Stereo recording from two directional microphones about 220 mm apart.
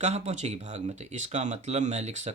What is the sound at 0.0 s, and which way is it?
Speech, 30° right (ahead or behind).